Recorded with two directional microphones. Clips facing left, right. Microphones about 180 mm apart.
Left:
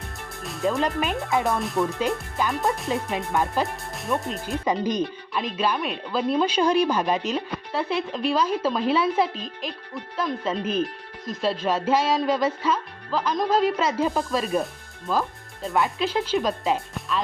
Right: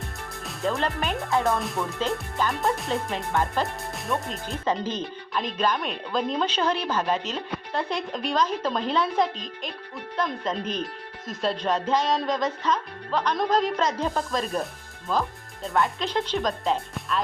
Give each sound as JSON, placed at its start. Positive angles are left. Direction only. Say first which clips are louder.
{"t": 0.4, "sound": "speech", "louder": "left 3 dB", "side_deg": 0}
{"t": 1.3, "sound": "speech", "louder": "right 1 dB", "side_deg": 15}
{"t": 1.5, "sound": "speech", "louder": "left 3 dB", "side_deg": 0}
{"t": 2.4, "sound": "speech", "louder": "left 1 dB", "side_deg": 10}
{"t": 2.7, "sound": "speech", "louder": "left 1 dB", "side_deg": 0}
{"t": 3.1, "sound": "speech", "louder": "left 2 dB", "side_deg": 20}
{"t": 3.5, "sound": "speech", "louder": "left 1 dB", "side_deg": 0}
{"t": 4.6, "sound": "speech", "louder": "left 3 dB", "side_deg": 15}